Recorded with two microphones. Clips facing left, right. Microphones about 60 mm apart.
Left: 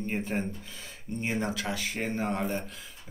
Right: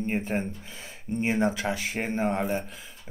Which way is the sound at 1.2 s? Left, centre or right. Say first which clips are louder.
Right 6 dB; right.